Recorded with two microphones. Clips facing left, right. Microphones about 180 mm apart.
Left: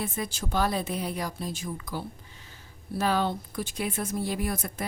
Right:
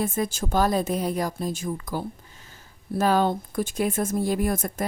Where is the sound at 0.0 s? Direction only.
45° right (ahead or behind).